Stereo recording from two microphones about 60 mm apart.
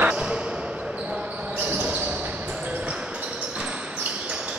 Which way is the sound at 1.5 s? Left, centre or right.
Right.